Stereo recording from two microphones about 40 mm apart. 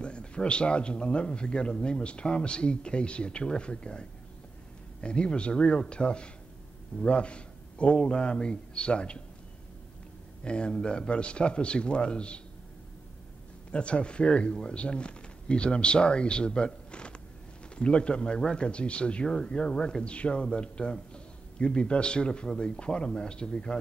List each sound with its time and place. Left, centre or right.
0.0 s a man's voice: left
10.4 s a man's voice: left
13.7 s a man's voice: left